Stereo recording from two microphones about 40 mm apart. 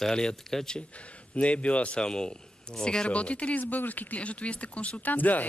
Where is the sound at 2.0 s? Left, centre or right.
Left.